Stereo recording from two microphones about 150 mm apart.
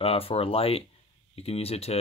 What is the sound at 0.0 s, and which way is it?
Speech, 40° left (ahead or behind).